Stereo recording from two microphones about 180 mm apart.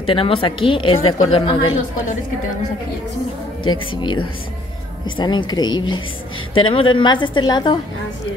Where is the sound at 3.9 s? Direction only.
25° left (ahead or behind).